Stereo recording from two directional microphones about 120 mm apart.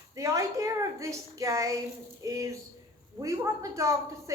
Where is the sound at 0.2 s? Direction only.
25° right (ahead or behind).